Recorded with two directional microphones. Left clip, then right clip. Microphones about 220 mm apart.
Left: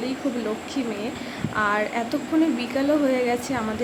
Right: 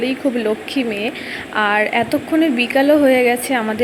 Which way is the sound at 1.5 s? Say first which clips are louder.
Right 8 dB; 20° right (ahead or behind).